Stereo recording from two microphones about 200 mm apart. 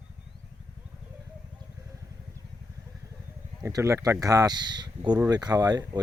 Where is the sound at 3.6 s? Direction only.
15° right (ahead or behind).